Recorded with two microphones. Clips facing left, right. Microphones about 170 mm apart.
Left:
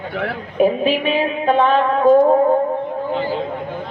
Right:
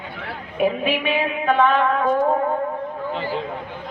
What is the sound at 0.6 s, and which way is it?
A woman's voice, 35° left (ahead or behind).